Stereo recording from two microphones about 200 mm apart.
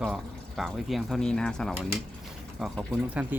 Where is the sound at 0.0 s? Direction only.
Centre (ahead or behind).